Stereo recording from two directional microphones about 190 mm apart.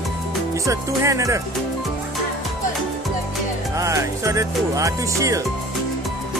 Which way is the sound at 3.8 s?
15° right (ahead or behind).